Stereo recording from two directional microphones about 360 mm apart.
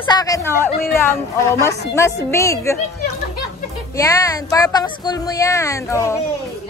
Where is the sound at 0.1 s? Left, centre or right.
Centre.